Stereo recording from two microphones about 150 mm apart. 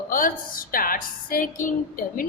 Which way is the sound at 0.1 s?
70° left (ahead or behind).